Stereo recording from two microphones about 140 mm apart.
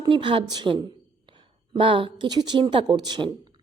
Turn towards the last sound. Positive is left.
turn(degrees=-30)  # may be behind; listen again after turning